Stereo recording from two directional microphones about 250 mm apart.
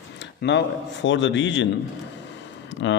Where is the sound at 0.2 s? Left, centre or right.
Left.